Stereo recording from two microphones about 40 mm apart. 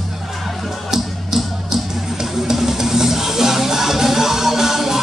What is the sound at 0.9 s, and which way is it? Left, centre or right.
Music, centre.